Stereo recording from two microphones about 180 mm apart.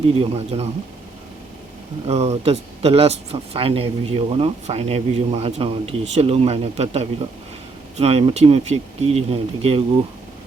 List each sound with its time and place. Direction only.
0.1 s speech: 30° right (ahead or behind)
2.0 s speech: 35° right (ahead or behind)